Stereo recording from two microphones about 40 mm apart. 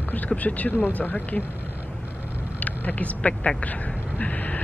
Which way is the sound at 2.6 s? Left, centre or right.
Left.